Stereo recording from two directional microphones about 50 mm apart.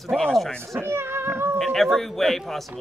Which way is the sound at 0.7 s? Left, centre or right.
Right.